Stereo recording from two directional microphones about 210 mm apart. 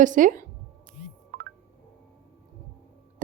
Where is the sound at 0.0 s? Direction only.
40° right (ahead or behind).